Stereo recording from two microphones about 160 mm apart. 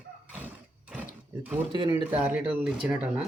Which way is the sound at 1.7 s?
35° right (ahead or behind).